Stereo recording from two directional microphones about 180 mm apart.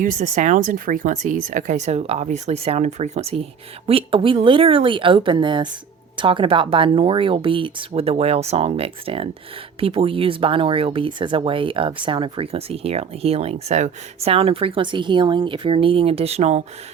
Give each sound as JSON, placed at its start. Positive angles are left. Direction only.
{"t": 0.0, "sound": "speech", "side_deg": -45}